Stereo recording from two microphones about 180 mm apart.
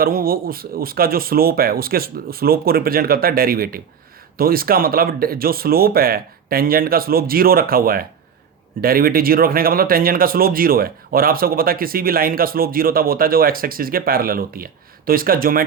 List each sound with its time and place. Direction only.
0.0 s speech: 55° right (ahead or behind)